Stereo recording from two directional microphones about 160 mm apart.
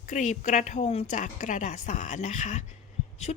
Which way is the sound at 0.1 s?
50° left (ahead or behind).